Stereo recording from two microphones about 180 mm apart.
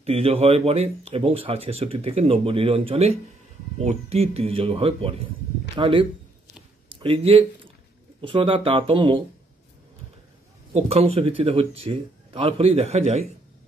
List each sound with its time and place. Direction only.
0.0 s speech: 35° right (ahead or behind)
10.7 s speech: 35° right (ahead or behind)